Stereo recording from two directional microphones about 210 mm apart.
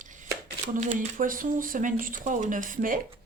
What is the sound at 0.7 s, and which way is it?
Speech, 35° right (ahead or behind).